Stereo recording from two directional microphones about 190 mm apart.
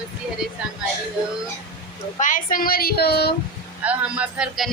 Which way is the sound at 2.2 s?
45° left (ahead or behind).